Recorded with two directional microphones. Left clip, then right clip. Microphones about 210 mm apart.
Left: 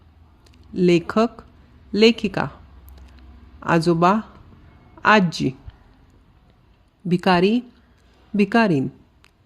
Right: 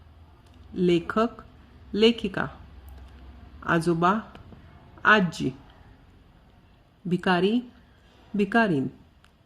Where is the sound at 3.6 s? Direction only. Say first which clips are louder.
Left 6 dB; 30° left (ahead or behind).